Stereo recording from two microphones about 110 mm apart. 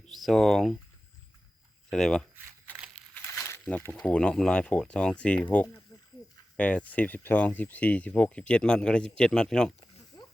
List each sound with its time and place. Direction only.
0.0 s speech: centre (ahead or behind)
1.9 s speech: 5° left (ahead or behind)
3.0 s crumpling: 5° left (ahead or behind)
3.3 s snake: 25° left (ahead or behind)
3.6 s speech: 15° left (ahead or behind)
5.9 s a sound: 35° left (ahead or behind)
6.6 s speech: 10° left (ahead or behind)
10.1 s a sound: 35° left (ahead or behind)